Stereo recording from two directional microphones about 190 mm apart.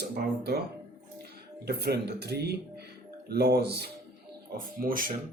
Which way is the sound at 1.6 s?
55° right (ahead or behind).